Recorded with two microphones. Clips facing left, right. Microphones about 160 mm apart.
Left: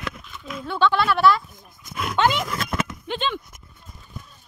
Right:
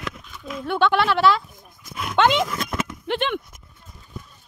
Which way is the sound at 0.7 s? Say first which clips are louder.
Right 1 dB; 60° right (ahead or behind).